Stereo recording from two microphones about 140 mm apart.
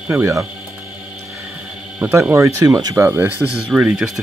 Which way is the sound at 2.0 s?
15° right (ahead or behind).